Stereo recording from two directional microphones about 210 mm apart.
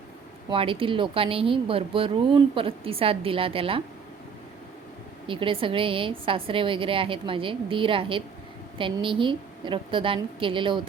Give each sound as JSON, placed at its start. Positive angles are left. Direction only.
{"t": 0.5, "sound": "a woman's voice", "side_deg": -25}
{"t": 5.3, "sound": "a woman's voice", "side_deg": -25}